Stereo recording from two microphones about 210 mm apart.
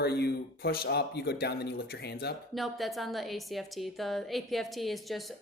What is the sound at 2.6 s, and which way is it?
A woman's voice, centre (ahead or behind).